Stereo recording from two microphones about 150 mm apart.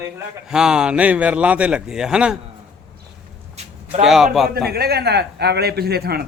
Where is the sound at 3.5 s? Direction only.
40° right (ahead or behind).